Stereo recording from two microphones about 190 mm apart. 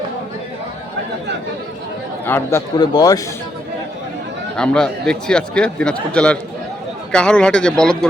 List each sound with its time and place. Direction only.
2.2 s a man's voice: 10° left (ahead or behind)
4.5 s speech: 5° left (ahead or behind)